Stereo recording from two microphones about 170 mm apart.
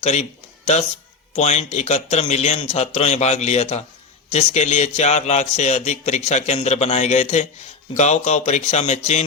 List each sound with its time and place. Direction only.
0.0 s a man's voice: 40° left (ahead or behind)